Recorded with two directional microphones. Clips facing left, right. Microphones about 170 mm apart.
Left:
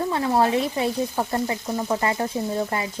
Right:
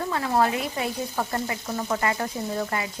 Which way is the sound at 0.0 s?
25° left (ahead or behind).